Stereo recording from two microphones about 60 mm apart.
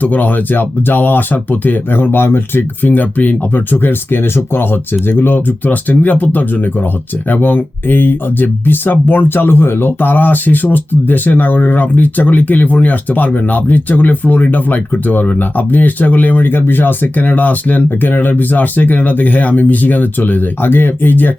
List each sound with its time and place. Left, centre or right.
0.0 s speech: left